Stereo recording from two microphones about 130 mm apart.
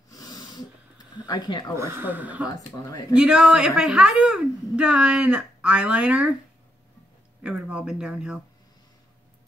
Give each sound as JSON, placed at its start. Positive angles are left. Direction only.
{"t": 0.1, "sound": "a sound", "side_deg": 30}
{"t": 1.8, "sound": "a woman's voice", "side_deg": -15}
{"t": 7.4, "sound": "a woman's voice", "side_deg": -10}